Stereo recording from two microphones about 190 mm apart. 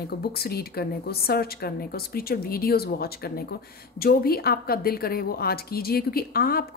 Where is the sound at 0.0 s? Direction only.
55° left (ahead or behind).